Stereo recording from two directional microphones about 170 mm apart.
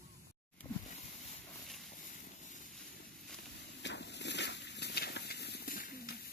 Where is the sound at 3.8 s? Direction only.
90° left; by 6.2 s 60° left (ahead or behind).